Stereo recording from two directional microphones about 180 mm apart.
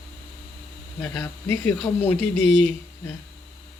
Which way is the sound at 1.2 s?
10° left (ahead or behind).